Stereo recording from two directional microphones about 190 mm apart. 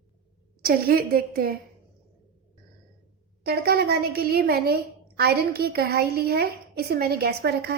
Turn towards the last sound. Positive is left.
turn(degrees=-55)  # may be behind; listen again after turning